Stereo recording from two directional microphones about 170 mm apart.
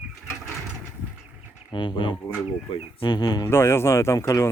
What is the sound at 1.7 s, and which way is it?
Speech, 30° left (ahead or behind).